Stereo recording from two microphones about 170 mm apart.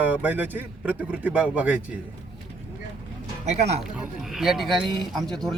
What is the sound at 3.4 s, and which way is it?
Speech, 40° right (ahead or behind).